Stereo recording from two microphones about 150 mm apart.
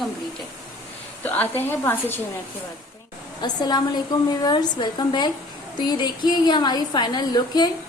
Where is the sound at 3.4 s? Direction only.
30° left (ahead or behind).